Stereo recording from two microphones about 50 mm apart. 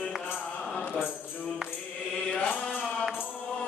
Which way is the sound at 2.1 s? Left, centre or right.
Centre.